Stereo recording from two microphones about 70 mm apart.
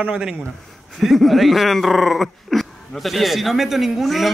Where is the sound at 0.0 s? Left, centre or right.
Centre.